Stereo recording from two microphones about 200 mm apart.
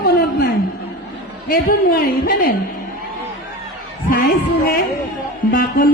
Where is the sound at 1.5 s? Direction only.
50° left (ahead or behind).